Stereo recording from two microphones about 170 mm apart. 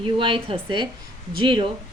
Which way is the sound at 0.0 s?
30° right (ahead or behind).